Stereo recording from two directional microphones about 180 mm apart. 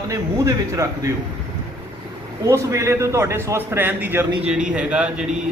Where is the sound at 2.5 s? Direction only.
15° right (ahead or behind).